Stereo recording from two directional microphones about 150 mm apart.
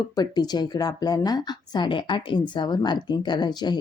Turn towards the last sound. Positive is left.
turn(degrees=30)  # may be behind; listen again after turning